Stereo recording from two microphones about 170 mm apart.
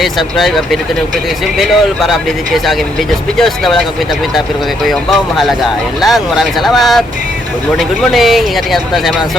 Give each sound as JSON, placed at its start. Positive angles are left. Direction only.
{"t": 0.0, "sound": "speech", "side_deg": 0}
{"t": 4.9, "sound": "speech", "side_deg": 0}